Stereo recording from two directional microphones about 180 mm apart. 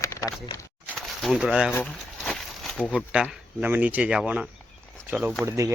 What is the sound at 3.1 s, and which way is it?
Speech, 5° right (ahead or behind).